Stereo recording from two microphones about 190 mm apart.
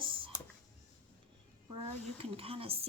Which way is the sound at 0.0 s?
25° right (ahead or behind).